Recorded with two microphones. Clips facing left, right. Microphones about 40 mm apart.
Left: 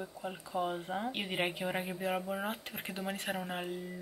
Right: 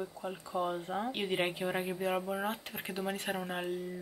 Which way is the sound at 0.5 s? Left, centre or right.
Centre.